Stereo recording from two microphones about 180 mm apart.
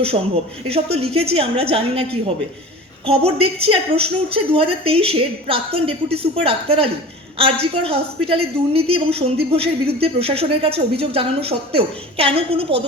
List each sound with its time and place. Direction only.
0.9 s a woman's voice: 30° right (ahead or behind)